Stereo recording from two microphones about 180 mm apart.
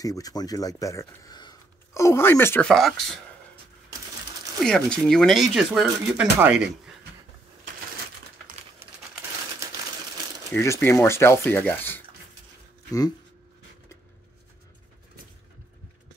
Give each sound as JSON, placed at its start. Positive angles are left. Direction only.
{"t": 0.0, "sound": "speech", "side_deg": 20}
{"t": 4.6, "sound": "speech", "side_deg": 5}
{"t": 9.6, "sound": "typewriter", "side_deg": -15}
{"t": 10.5, "sound": "speech", "side_deg": 15}